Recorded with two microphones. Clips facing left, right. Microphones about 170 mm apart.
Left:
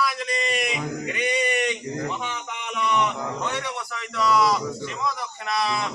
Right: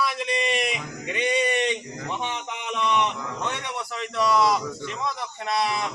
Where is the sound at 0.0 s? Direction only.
25° right (ahead or behind).